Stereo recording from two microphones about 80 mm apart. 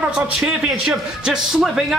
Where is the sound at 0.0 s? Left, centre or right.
Centre.